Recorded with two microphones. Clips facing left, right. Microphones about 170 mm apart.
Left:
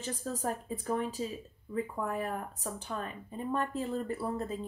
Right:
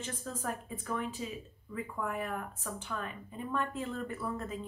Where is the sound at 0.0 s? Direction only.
35° left (ahead or behind).